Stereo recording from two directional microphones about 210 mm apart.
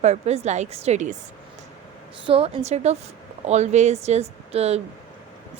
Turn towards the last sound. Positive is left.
turn(degrees=-30)  # may be behind; listen again after turning